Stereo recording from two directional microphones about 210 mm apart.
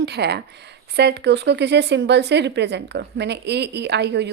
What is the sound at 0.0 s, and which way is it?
A woman's voice, 50° right (ahead or behind).